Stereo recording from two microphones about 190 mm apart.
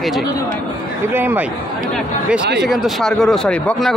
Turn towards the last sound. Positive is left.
turn(degrees=0)  # may be behind; listen again after turning